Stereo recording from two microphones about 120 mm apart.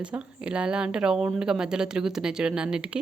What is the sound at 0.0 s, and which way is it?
A woman's voice, 10° right (ahead or behind).